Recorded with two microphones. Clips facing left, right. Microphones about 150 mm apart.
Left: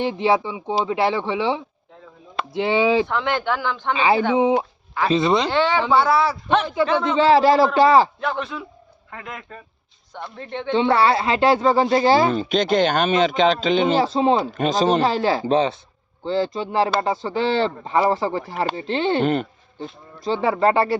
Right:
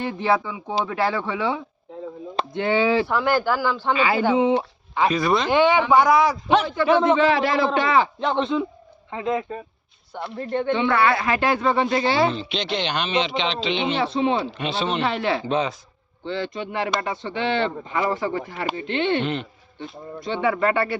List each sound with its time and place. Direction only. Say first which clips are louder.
0.0 s speech: left 3 dB; 20° left (ahead or behind)
3.1 s speech: right 2 dB; 5° right (ahead or behind)
5.1 s speech: left 7 dB; 20° left (ahead or behind)
5.5 s speech: right 2 dB; 15° right (ahead or behind)
7.2 s speech: left 5 dB; 35° left (ahead or behind)
8.2 s speech: right 4 dB; 25° right (ahead or behind)
10.1 s speech: right 2 dB; 10° right (ahead or behind)
10.8 s speech: left 6 dB; 30° left (ahead or behind)